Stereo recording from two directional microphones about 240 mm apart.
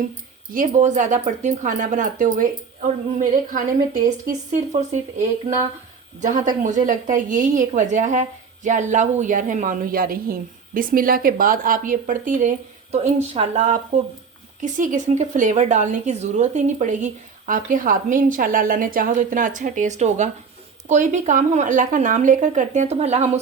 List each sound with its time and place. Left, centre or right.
0.5 s speech: right
6.1 s speech: right